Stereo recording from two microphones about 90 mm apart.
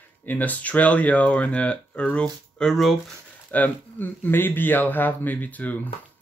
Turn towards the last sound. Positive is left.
turn(degrees=20)  # may be behind; listen again after turning